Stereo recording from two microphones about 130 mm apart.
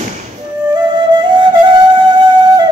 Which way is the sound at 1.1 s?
35° right (ahead or behind).